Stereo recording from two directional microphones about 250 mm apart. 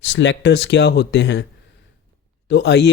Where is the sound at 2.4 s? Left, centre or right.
Left.